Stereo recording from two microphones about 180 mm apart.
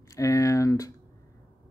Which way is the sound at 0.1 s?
20° left (ahead or behind).